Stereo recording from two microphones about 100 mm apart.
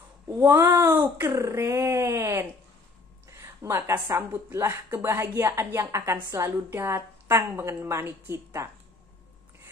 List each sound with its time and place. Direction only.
0.3 s a woman's voice: 30° right (ahead or behind)